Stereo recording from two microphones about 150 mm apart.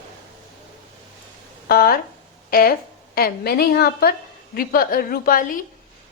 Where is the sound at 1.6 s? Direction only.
85° left.